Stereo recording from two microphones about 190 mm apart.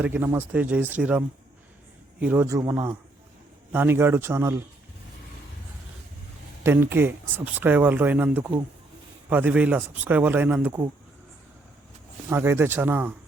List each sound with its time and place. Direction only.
0.0 s speech: 10° right (ahead or behind)
2.2 s speech: 10° right (ahead or behind)
6.6 s speech: 10° right (ahead or behind)
12.3 s speech: 15° right (ahead or behind)